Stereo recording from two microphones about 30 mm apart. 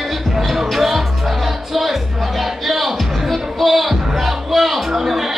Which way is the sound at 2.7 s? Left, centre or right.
Centre.